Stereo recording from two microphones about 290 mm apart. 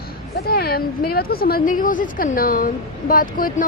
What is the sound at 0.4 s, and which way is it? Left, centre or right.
A woman's voice, left.